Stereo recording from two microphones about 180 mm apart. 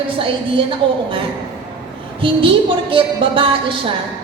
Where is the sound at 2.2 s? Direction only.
30° right (ahead or behind).